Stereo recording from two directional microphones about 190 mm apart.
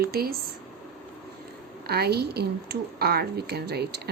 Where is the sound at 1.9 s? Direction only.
55° right (ahead or behind).